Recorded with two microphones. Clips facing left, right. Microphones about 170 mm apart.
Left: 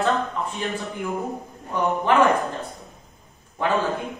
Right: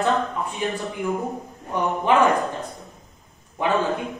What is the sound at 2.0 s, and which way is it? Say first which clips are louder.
Speech: right 1 dB; 15° right (ahead or behind).